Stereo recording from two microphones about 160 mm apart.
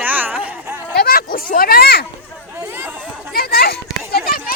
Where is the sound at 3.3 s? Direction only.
70° left (ahead or behind).